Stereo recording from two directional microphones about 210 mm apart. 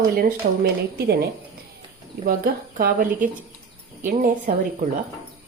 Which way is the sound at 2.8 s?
40° right (ahead or behind).